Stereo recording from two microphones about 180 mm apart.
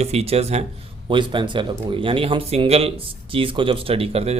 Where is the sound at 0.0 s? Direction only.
35° right (ahead or behind).